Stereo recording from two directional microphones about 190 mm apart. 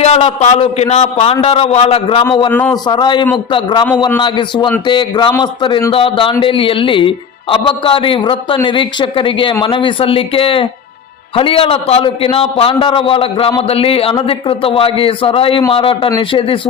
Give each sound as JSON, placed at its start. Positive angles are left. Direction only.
{"t": 0.0, "sound": "a man's voice", "side_deg": 35}
{"t": 2.5, "sound": "a man's voice", "side_deg": 10}
{"t": 2.8, "sound": "a man's voice", "side_deg": 25}